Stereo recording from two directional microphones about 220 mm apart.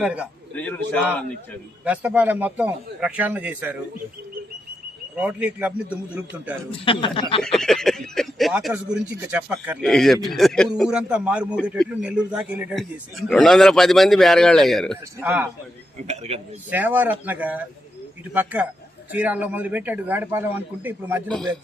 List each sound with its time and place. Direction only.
0.0 s a man's voice: 5° right (ahead or behind)
0.5 s a man's voice: 5° left (ahead or behind)
1.8 s a man's voice: 5° right (ahead or behind)
5.1 s a man's voice: 5° right (ahead or behind)
6.7 s speech: 25° left (ahead or behind)
7.4 s a man's voice: centre (ahead or behind)
16.0 s a man's voice: 30° right (ahead or behind)
16.6 s a man's voice: 5° right (ahead or behind)